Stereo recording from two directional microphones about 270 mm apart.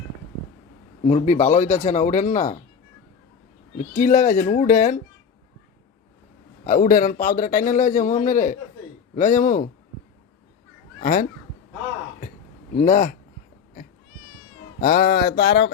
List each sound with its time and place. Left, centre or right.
1.0 s a man's voice: left
3.8 s a man's voice: left
6.7 s a man's voice: left
9.1 s a sound: left
11.0 s speech: left
12.8 s a man's voice: left
14.8 s a sound: left